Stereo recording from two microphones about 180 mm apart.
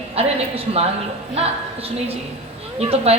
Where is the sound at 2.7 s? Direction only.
35° right (ahead or behind).